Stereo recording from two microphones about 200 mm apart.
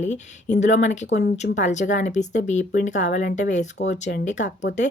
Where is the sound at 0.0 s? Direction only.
35° left (ahead or behind).